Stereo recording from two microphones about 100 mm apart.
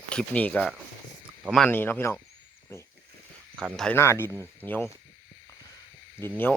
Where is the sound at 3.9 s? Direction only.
25° left (ahead or behind).